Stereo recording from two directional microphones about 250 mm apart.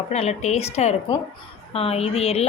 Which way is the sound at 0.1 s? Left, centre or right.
Left.